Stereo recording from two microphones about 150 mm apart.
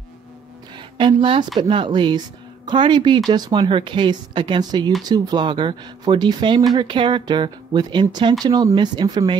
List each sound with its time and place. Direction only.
0.7 s speech: 35° right (ahead or behind)